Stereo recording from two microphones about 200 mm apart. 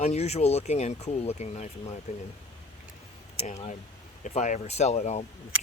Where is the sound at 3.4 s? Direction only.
35° left (ahead or behind).